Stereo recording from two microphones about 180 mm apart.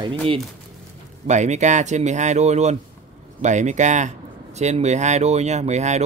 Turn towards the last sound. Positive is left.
turn(degrees=-40)  # may be behind; listen again after turning